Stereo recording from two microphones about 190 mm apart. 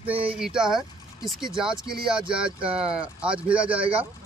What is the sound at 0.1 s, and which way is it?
Speech, 30° right (ahead or behind).